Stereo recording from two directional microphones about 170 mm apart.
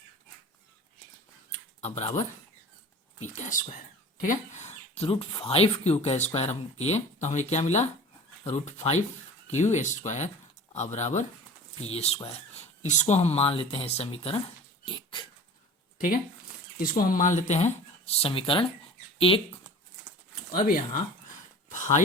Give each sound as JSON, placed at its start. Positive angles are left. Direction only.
{"t": 1.8, "sound": "speech", "side_deg": 40}
{"t": 14.8, "sound": "dog", "side_deg": 30}
{"t": 17.0, "sound": "speech", "side_deg": 50}
{"t": 20.5, "sound": "speech", "side_deg": 55}
{"t": 21.7, "sound": "a sound", "side_deg": 50}